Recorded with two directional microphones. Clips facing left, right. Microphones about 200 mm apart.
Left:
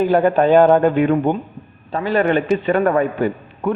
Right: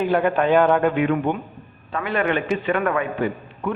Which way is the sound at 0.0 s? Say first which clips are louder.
Left 5 dB; 40° left (ahead or behind).